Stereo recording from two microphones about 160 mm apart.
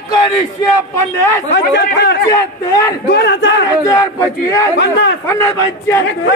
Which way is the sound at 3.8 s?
20° left (ahead or behind).